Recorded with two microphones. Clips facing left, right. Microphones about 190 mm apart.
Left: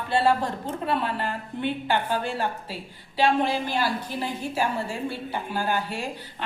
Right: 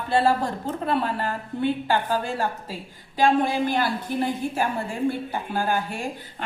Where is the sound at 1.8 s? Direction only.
40° right (ahead or behind).